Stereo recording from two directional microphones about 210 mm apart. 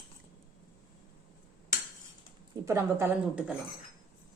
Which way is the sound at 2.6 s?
15° right (ahead or behind).